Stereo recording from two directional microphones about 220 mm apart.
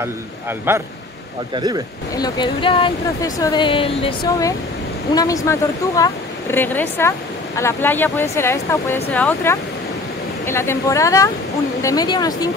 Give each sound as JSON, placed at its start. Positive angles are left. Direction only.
{"t": 0.0, "sound": "a man's voice", "side_deg": -10}
{"t": 2.1, "sound": "speech", "side_deg": 20}